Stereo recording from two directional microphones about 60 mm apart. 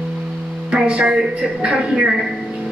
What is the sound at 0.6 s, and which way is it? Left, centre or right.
A woman's voice, centre.